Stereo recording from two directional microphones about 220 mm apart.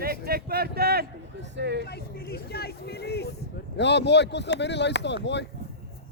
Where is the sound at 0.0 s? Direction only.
45° right (ahead or behind).